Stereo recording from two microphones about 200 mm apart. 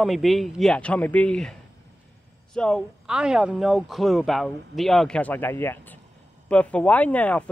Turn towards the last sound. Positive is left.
turn(degrees=5)  # may be behind; listen again after turning